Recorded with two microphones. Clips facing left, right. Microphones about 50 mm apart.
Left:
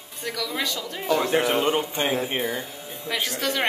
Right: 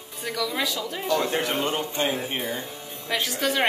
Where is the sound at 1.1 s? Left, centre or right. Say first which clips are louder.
Left 4 dB; centre.